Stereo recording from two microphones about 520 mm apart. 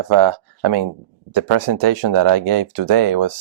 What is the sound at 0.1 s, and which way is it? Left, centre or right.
Speech, right.